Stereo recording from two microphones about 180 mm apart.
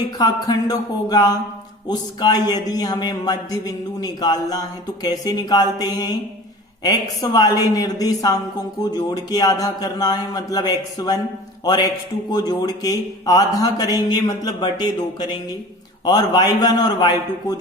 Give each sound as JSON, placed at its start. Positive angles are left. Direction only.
{"t": 0.2, "sound": "a man's voice", "side_deg": 20}